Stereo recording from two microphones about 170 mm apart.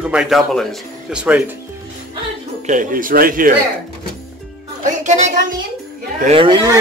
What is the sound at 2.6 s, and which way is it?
Speech, 50° right (ahead or behind).